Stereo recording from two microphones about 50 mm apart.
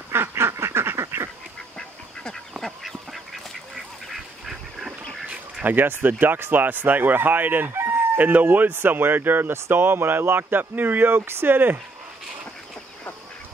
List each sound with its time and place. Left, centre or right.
0.1 s duck: right
1.8 s duck: centre
2.6 s duck: centre
5.3 s speech: right